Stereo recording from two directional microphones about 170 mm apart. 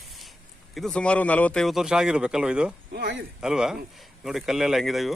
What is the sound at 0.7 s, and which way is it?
Speech, 5° left (ahead or behind).